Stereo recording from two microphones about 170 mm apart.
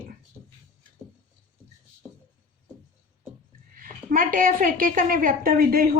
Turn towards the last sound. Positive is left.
turn(degrees=-60)  # may be behind; listen again after turning